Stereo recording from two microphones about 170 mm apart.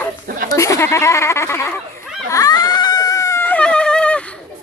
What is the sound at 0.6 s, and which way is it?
Speech, 15° left (ahead or behind).